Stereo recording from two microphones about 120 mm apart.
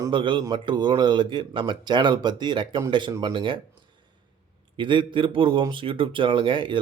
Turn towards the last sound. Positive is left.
turn(degrees=-45)  # may be behind; listen again after turning